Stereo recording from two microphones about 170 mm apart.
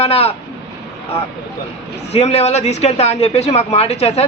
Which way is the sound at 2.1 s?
35° left (ahead or behind).